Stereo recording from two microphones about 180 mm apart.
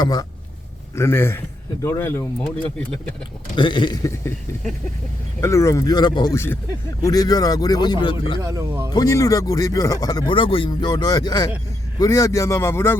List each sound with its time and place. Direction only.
0.0 s speech: 20° left (ahead or behind)
3.5 s speech: 25° left (ahead or behind)
5.4 s speech: 15° left (ahead or behind)
8.4 s speech: 15° right (ahead or behind)
8.9 s speech: 20° left (ahead or behind)